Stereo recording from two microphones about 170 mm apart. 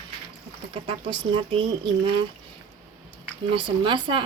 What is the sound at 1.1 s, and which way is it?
Speech, 30° right (ahead or behind).